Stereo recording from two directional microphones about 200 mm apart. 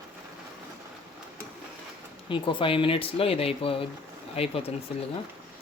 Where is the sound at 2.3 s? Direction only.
25° left (ahead or behind).